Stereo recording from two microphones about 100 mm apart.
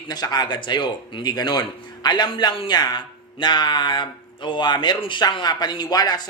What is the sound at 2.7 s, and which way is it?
A man's voice, 45° left (ahead or behind).